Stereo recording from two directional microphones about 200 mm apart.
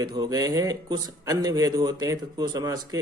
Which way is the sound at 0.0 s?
20° right (ahead or behind).